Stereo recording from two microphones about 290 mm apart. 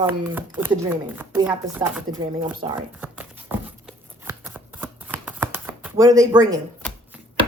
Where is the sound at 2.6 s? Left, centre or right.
Centre.